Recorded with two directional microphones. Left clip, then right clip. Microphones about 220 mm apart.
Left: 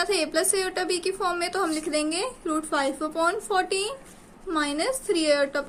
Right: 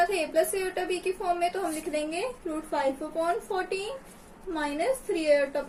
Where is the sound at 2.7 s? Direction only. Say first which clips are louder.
Even; 50° left (ahead or behind).